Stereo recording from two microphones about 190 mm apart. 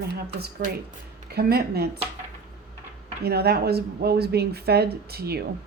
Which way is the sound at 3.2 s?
55° right (ahead or behind).